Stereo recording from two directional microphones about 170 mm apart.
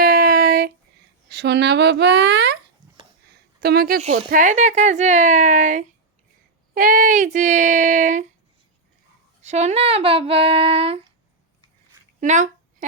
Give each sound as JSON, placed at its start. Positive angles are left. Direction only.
{"t": 0.0, "sound": "a sound", "side_deg": -55}
{"t": 1.3, "sound": "speech", "side_deg": -75}
{"t": 3.6, "sound": "a woman's voice", "side_deg": -65}
{"t": 4.0, "sound": "speech", "side_deg": -50}
{"t": 9.4, "sound": "speech", "side_deg": -40}
{"t": 12.2, "sound": "speech", "side_deg": -45}